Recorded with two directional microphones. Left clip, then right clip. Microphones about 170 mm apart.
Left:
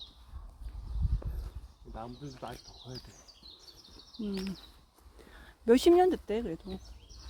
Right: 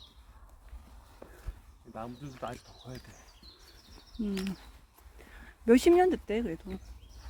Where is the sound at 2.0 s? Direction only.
65° right (ahead or behind).